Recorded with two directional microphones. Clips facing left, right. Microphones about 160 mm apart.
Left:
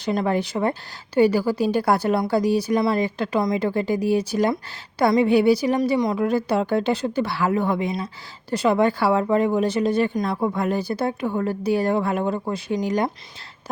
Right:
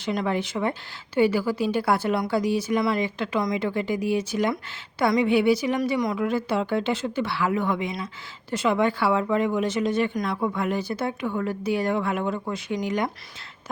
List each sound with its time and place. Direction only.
0.0 s a woman's voice: 35° left (ahead or behind)